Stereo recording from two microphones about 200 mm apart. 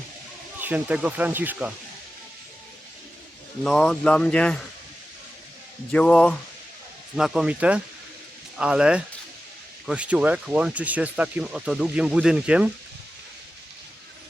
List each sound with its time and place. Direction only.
0.6 s speech: 5° right (ahead or behind)
3.6 s speech: 5° left (ahead or behind)
5.9 s speech: 5° left (ahead or behind)